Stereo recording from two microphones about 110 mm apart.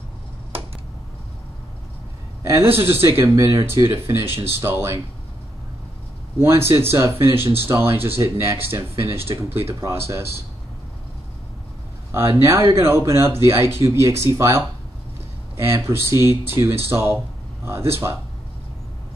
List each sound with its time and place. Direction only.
2.4 s a man's voice: 25° right (ahead or behind)
6.4 s speech: 20° right (ahead or behind)
12.1 s speech: 25° right (ahead or behind)